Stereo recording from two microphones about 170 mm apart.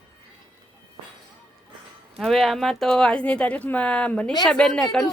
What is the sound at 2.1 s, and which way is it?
Speech, centre (ahead or behind).